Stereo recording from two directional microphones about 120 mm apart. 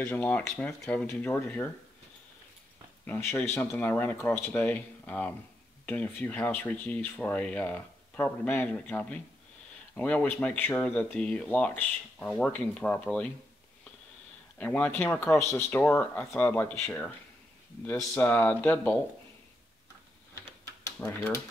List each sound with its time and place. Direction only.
0.0 s speech: 15° left (ahead or behind)
3.1 s speech: 20° left (ahead or behind)
14.6 s speech: 10° left (ahead or behind)
21.0 s speech: 20° left (ahead or behind)